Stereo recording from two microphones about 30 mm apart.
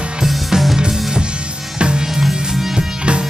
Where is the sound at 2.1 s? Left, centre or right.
Centre.